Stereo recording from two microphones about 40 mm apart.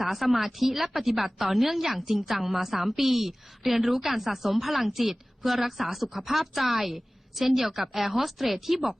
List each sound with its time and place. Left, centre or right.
0.0 s a woman's voice: centre